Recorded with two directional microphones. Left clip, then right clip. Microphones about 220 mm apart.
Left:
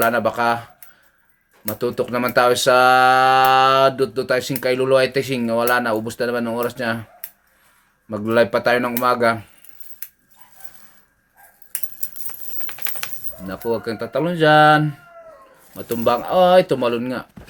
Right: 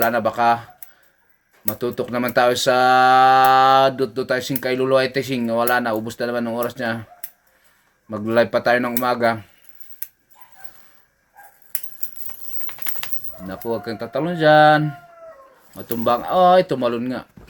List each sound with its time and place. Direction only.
0.0 s speech: 10° left (ahead or behind)
12.3 s a sound: 30° left (ahead or behind)
13.5 s speech: 10° left (ahead or behind)